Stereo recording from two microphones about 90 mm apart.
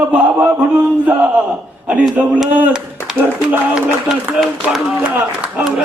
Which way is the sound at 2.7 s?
10° right (ahead or behind).